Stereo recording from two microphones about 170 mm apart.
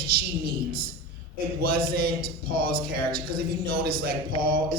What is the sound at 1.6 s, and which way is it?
Speech, 65° right (ahead or behind).